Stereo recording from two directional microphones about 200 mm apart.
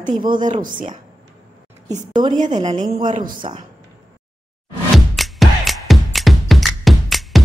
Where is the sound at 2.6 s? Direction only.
25° right (ahead or behind).